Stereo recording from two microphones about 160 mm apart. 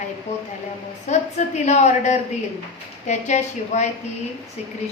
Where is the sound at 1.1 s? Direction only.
45° left (ahead or behind).